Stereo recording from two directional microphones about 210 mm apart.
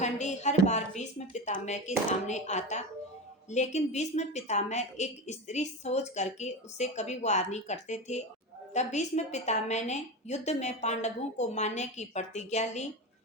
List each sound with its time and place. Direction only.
0.0 s a woman's voice: 35° left (ahead or behind)